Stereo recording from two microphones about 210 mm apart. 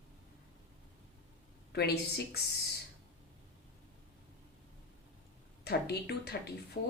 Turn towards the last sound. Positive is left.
turn(degrees=50)  # may be behind; listen again after turning